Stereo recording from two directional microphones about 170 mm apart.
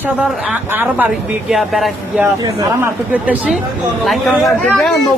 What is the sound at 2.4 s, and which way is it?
Speech, 20° right (ahead or behind).